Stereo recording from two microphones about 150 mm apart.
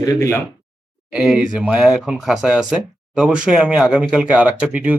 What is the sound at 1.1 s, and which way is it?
Speech, centre (ahead or behind).